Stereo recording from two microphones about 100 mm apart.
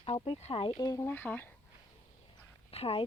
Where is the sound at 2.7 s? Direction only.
75° left (ahead or behind).